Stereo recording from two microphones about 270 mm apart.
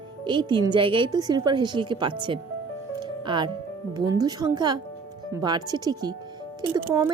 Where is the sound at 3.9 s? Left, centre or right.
Centre.